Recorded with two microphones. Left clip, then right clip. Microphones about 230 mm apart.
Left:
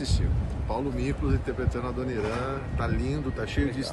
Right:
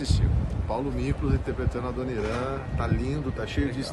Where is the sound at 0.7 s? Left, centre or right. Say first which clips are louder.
Even; centre.